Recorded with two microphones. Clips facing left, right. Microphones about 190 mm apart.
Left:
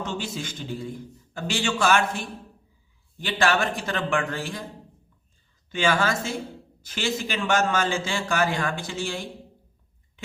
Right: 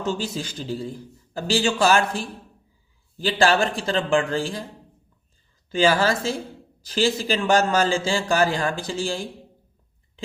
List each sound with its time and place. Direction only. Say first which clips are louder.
0.0 s a man's voice: right 4 dB; 35° right (ahead or behind)
5.7 s a man's voice: right 4 dB; 35° right (ahead or behind)